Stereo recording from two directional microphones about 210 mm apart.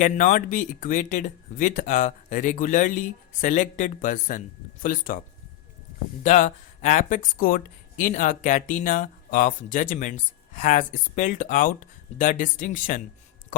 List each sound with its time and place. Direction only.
0.0 s speech: 40° left (ahead or behind)
6.2 s speech: 35° left (ahead or behind)